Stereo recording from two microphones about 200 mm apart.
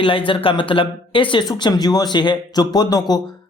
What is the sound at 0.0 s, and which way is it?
Speech, 25° left (ahead or behind).